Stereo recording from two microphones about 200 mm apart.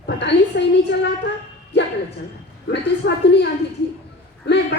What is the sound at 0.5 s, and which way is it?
Speech, 45° left (ahead or behind).